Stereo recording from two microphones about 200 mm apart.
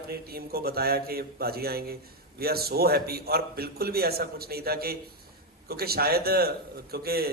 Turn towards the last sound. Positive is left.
turn(degrees=-50)  # may be behind; listen again after turning